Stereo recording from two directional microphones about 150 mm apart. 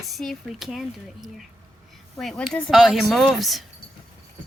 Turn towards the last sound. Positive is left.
turn(degrees=0)  # may be behind; listen again after turning